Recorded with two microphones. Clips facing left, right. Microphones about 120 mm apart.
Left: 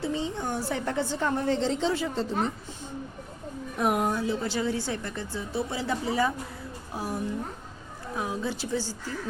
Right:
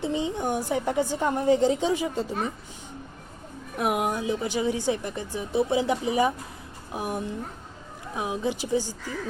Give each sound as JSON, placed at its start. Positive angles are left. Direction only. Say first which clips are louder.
{"t": 0.0, "sound": "speech", "louder": "right 3 dB", "side_deg": -15}
{"t": 3.8, "sound": "speech", "louder": "even", "side_deg": -10}